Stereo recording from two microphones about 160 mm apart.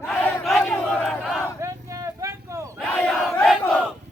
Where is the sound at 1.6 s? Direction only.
20° right (ahead or behind).